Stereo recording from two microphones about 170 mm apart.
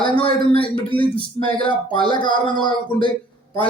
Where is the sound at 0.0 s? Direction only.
30° left (ahead or behind).